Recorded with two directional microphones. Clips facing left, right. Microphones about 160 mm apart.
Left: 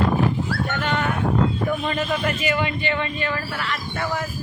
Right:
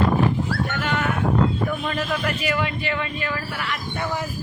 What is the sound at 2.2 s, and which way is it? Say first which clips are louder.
A man's voice: left 1 dB; centre (ahead or behind).